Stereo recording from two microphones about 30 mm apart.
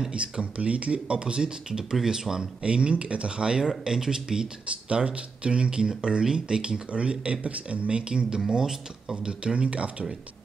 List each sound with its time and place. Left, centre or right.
0.1 s speech: right; by 2.4 s centre
2.6 s speech: right
3.6 s speech: right
4.8 s speech: right
6.9 s speech: right
7.9 s speech: right
8.5 s speech: right